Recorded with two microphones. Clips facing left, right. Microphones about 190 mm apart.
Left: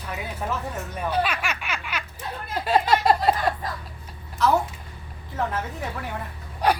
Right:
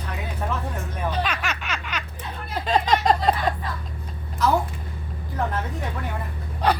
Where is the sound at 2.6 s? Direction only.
10° left (ahead or behind).